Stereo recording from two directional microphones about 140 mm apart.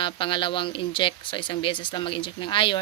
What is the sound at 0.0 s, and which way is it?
Speech, 35° left (ahead or behind).